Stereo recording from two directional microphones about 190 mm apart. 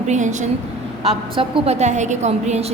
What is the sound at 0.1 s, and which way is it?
A woman's voice, 40° right (ahead or behind).